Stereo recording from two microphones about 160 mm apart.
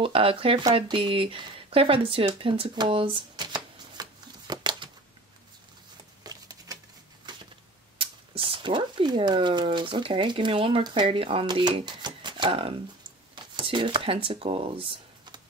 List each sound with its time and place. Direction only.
0.0 s speech: 35° right (ahead or behind)
6.2 s a sound: 25° right (ahead or behind)
8.0 s speech: 35° right (ahead or behind)